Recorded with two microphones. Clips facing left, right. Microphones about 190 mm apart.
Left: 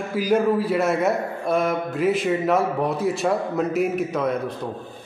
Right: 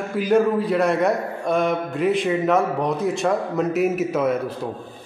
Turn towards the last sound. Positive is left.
turn(degrees=-5)  # may be behind; listen again after turning